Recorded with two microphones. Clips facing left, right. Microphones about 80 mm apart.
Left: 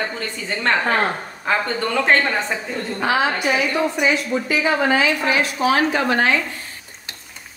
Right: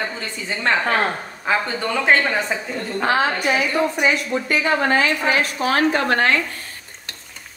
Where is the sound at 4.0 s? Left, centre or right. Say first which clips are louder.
Even; right.